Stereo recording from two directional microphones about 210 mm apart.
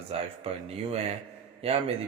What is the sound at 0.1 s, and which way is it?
Speech, 30° right (ahead or behind).